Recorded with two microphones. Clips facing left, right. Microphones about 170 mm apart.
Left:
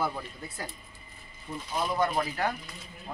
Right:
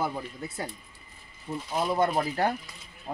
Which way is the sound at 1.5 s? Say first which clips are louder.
Right 3 dB; 30° right (ahead or behind).